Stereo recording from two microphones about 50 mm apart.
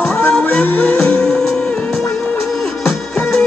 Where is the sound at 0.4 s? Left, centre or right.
Left.